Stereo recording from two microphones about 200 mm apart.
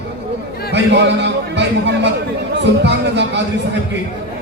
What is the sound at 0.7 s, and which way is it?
A man's voice, 60° right (ahead or behind).